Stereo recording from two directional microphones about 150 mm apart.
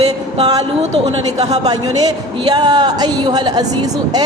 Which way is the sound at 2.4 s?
25° right (ahead or behind).